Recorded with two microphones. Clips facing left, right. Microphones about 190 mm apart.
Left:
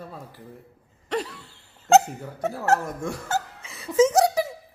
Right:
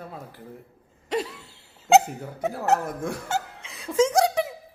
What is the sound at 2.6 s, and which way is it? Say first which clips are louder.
Speech: left 1 dB; centre (ahead or behind).